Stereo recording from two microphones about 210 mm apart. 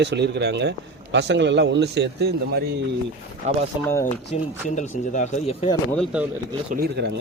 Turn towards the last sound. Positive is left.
turn(degrees=-55)  # may be behind; listen again after turning